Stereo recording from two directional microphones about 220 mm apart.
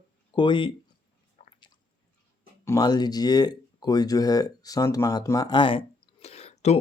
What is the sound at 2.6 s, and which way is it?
Speech, 15° left (ahead or behind).